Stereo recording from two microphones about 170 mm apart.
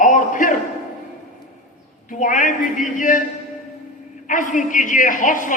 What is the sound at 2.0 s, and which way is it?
A woman's voice, 50° left (ahead or behind).